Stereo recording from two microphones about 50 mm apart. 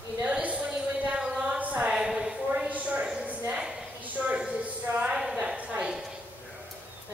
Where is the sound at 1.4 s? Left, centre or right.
Right.